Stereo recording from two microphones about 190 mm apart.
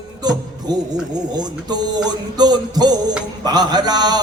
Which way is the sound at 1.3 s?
20° right (ahead or behind).